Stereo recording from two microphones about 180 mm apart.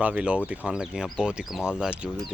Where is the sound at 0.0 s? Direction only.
5° right (ahead or behind).